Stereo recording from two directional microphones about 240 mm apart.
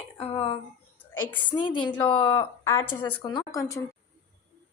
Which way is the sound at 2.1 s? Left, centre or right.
Left.